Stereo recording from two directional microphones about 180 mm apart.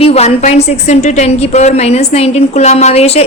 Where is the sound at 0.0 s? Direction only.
35° left (ahead or behind).